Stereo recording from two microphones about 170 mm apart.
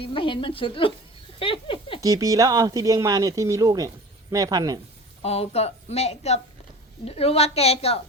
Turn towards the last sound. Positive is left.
turn(degrees=35)  # may be behind; listen again after turning